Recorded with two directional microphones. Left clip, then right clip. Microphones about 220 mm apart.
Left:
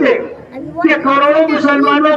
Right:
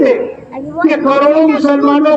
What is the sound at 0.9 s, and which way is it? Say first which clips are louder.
A man's voice: right 1 dB; 50° left (ahead or behind).